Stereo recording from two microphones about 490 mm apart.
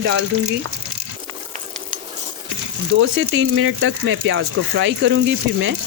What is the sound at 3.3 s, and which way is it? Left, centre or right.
Speech, right.